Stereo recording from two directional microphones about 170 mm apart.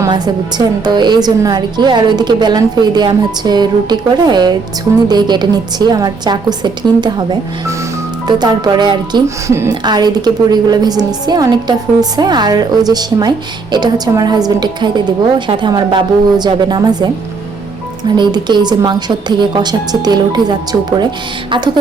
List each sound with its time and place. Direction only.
0.0 s speech: 25° right (ahead or behind)
18.2 s speech: 25° right (ahead or behind)